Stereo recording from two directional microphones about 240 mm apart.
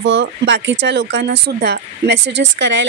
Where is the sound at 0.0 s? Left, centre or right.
Right.